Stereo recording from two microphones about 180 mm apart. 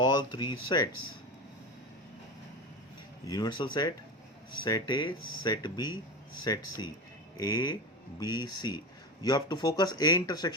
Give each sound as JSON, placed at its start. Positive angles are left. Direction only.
{"t": 0.0, "sound": "speech", "side_deg": 25}
{"t": 3.2, "sound": "speech", "side_deg": 20}